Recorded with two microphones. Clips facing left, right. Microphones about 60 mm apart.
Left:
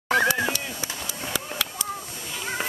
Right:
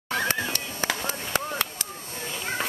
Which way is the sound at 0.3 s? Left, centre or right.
Right.